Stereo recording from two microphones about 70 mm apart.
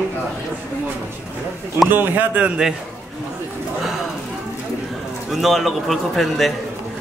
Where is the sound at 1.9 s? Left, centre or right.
Right.